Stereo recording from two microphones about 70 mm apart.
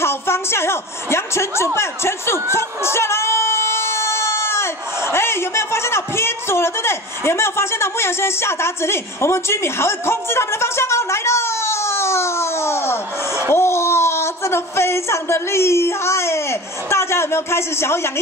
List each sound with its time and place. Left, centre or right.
0.0 s speech: left